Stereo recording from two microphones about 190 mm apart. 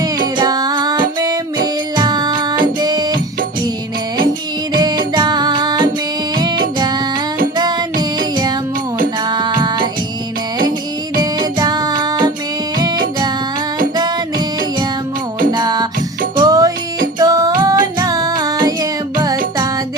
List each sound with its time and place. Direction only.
0.3 s music: 20° right (ahead or behind)
4.7 s music: 20° right (ahead or behind)
7.5 s music: 20° right (ahead or behind)
9.3 s music: 20° right (ahead or behind)
11.2 s music: 20° right (ahead or behind)
15.5 s music: 20° right (ahead or behind)